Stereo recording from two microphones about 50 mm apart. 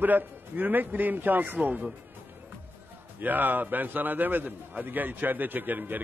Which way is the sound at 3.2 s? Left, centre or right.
Right.